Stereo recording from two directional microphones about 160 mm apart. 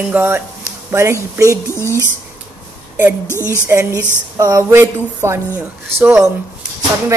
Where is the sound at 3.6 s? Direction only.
15° right (ahead or behind).